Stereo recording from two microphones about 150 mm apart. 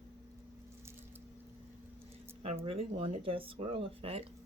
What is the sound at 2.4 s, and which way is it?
Speech, 40° right (ahead or behind).